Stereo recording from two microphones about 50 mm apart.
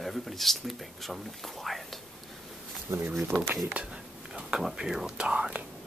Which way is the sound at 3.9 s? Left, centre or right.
Centre.